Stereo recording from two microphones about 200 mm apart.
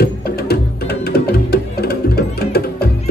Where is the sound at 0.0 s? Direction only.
50° left (ahead or behind).